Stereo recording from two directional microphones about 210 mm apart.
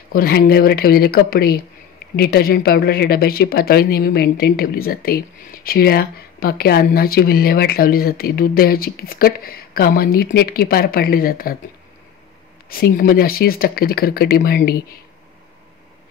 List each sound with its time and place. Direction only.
0.1 s speech: 45° left (ahead or behind)
12.6 s speech: 45° left (ahead or behind)